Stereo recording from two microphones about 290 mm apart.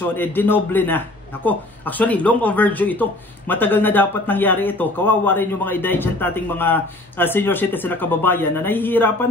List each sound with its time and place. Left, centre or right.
0.0 s speech: centre